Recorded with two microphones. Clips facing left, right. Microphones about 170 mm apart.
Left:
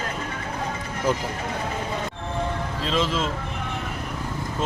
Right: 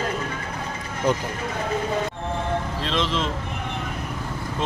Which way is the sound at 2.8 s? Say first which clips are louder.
Left 2 dB; 5° left (ahead or behind).